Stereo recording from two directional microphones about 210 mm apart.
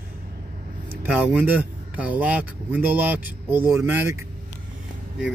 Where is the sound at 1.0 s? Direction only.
5° right (ahead or behind).